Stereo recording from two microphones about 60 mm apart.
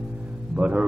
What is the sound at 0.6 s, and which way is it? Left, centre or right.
Mantra, centre.